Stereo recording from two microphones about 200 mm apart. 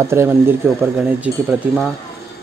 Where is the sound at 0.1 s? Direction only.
10° right (ahead or behind).